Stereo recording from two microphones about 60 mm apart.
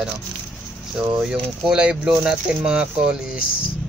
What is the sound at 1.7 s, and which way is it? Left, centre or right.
Speech, centre.